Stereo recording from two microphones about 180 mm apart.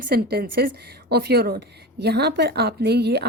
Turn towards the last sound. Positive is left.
turn(degrees=-65)  # may be behind; listen again after turning